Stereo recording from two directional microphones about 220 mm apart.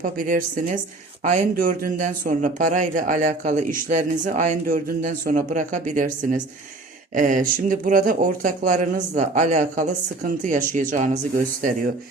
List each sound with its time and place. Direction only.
0.0 s speech: 40° right (ahead or behind)